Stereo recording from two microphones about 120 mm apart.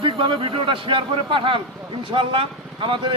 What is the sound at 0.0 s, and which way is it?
A man's voice, 50° right (ahead or behind).